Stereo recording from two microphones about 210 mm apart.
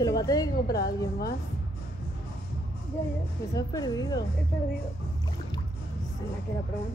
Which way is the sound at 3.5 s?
20° left (ahead or behind).